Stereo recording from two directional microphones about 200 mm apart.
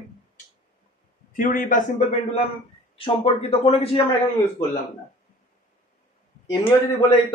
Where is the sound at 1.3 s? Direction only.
45° left (ahead or behind).